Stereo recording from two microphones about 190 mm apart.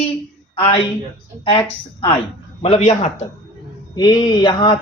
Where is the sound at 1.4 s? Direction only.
30° left (ahead or behind).